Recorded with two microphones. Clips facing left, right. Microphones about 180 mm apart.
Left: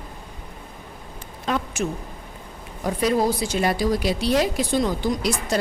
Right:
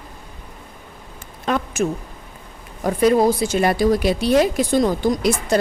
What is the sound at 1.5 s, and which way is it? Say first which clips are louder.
Speech: right 3 dB; 60° right (ahead or behind).